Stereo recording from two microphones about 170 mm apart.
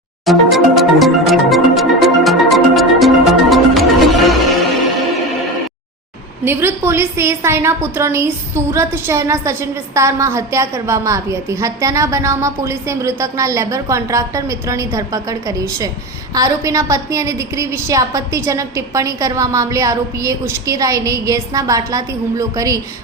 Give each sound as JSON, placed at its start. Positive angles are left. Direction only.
{"t": 0.3, "sound": "music", "side_deg": 0}
{"t": 6.4, "sound": "a woman's voice", "side_deg": -15}